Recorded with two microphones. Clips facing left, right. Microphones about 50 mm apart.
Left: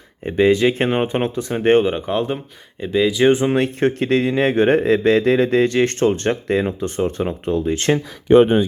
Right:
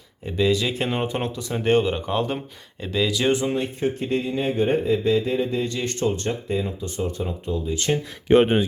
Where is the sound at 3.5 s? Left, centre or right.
Left.